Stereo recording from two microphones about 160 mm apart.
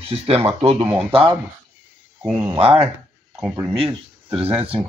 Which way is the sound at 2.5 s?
35° right (ahead or behind).